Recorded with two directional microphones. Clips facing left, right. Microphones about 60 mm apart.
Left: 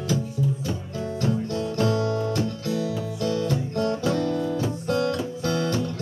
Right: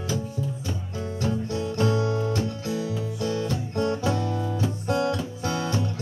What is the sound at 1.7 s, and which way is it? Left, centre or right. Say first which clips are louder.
Music: even; right.